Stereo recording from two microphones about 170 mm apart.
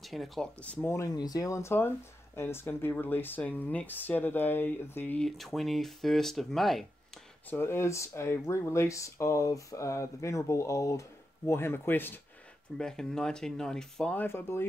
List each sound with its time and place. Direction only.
0.0 s speech: centre (ahead or behind)
7.4 s speech: 15° left (ahead or behind)